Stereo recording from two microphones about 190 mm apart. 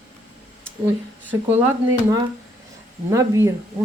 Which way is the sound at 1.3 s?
10° right (ahead or behind).